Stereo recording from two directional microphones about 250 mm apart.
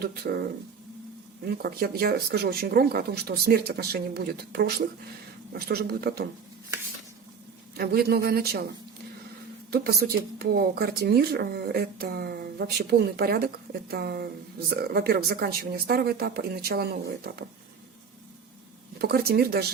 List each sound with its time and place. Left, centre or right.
0.0 s speech: right
1.5 s speech: right
7.8 s speech: right
9.7 s speech: right
19.0 s speech: right